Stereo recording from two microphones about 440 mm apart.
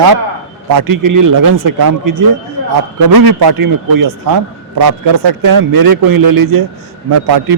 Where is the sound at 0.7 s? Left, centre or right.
Right.